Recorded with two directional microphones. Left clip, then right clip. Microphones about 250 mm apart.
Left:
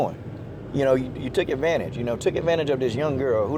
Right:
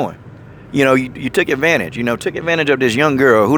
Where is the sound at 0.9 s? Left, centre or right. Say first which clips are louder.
Right 8 dB; right.